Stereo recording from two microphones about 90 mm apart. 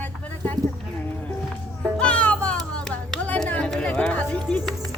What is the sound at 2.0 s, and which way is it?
Music, 10° left (ahead or behind).